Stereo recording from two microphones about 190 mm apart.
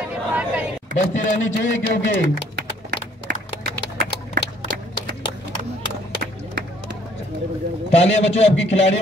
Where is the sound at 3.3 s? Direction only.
55° right (ahead or behind).